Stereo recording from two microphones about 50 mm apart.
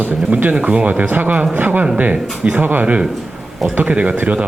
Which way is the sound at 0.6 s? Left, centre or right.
Right.